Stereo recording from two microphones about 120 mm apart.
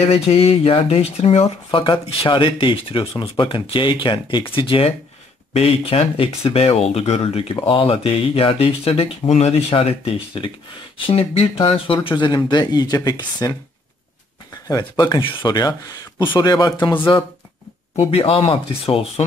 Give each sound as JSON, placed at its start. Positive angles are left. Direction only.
{"t": 0.1, "sound": "speech", "side_deg": 55}
{"t": 5.5, "sound": "speech", "side_deg": 60}
{"t": 14.7, "sound": "speech", "side_deg": 30}
{"t": 17.9, "sound": "speech", "side_deg": 50}